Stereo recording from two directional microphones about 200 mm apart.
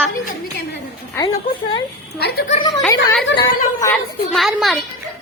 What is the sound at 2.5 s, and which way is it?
A woman's voice, 25° left (ahead or behind).